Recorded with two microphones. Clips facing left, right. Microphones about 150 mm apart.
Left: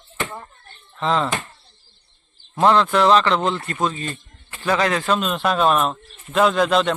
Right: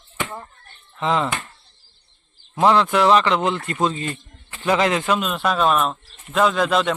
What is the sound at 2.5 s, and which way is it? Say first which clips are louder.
A man's voice: even; 10° right (ahead or behind).